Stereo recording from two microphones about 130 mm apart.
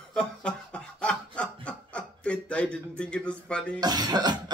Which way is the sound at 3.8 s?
30° right (ahead or behind).